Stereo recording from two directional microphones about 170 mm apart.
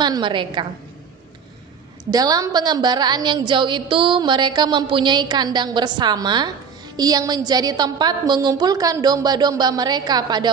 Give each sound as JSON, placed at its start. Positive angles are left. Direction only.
{"t": 0.0, "sound": "a woman's voice", "side_deg": -25}
{"t": 2.0, "sound": "a woman's voice", "side_deg": -20}